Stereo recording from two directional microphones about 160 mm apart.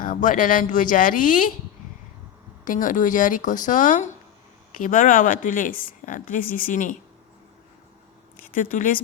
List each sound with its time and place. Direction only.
0.0 s speech: 55° left (ahead or behind)
2.6 s speech: 55° left (ahead or behind)
8.5 s speech: 55° left (ahead or behind)